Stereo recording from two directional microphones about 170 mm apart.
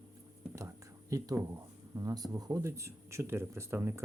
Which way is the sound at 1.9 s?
20° right (ahead or behind).